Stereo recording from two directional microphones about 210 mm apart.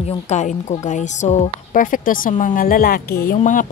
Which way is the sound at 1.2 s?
40° left (ahead or behind).